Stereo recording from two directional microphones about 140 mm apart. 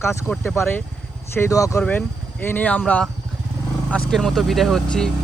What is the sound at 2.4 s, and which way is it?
Speech, 15° left (ahead or behind).